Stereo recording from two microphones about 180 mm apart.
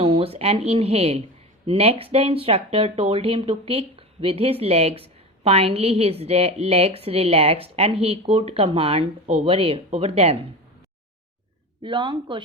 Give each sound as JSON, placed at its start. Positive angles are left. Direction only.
{"t": 0.0, "sound": "speech", "side_deg": -30}
{"t": 11.8, "sound": "a woman's voice", "side_deg": -25}